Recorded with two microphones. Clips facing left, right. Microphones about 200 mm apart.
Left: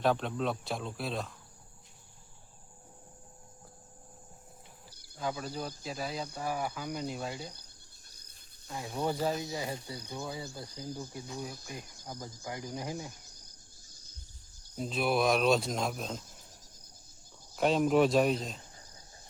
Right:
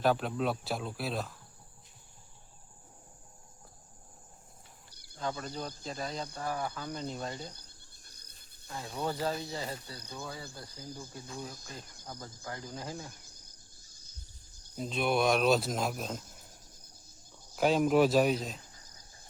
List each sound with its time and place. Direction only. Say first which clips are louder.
0.0 s speech: right 1 dB; 5° right (ahead or behind)
5.1 s speech: left 1 dB; 5° left (ahead or behind)
8.7 s speech: left 2 dB; 15° left (ahead or behind)
14.8 s speech: even; centre (ahead or behind)
17.6 s speech: even; centre (ahead or behind)